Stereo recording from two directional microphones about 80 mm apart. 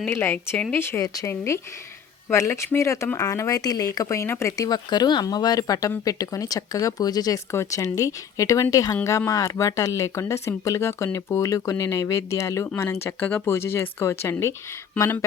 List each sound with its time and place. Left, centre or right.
0.1 s speech: left
0.5 s speech: centre
0.8 s speech: left
1.0 s speech: left
1.3 s speech: left
4.7 s speech: left
7.5 s speech: left
13.5 s speech: left
15.0 s speech: left